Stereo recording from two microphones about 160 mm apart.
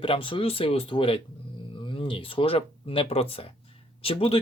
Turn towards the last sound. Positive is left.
turn(degrees=35)  # may be behind; listen again after turning